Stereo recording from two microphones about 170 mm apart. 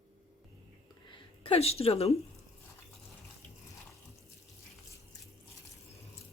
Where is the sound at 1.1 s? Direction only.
35° left (ahead or behind).